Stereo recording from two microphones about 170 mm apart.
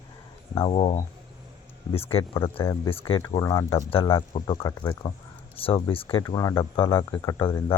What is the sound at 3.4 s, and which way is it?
Speech, 20° left (ahead or behind).